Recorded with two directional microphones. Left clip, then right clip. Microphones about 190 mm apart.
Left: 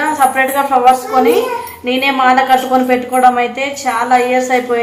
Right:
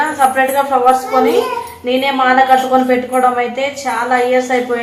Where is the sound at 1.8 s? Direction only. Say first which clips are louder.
Left 1 dB; 30° left (ahead or behind).